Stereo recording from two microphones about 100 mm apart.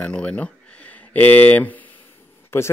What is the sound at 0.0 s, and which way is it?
Speech, 10° left (ahead or behind).